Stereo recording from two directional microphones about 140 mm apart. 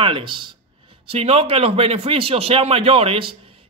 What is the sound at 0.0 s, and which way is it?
A man's voice, 35° right (ahead or behind).